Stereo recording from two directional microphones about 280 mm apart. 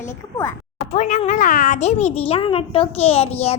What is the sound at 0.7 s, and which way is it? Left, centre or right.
A child's voice, left.